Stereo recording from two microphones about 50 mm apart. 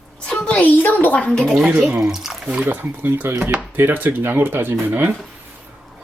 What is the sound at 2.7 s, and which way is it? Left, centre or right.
Speech, right.